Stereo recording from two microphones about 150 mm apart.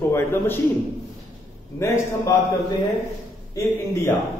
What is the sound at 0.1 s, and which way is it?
Speech, 15° left (ahead or behind).